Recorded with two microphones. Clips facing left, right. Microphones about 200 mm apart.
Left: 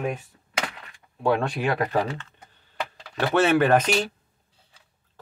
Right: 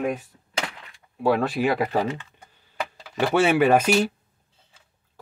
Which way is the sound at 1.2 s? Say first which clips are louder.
Right 2 dB; 5° right (ahead or behind).